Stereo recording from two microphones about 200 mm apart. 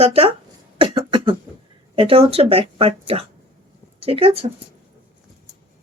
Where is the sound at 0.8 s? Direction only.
25° right (ahead or behind).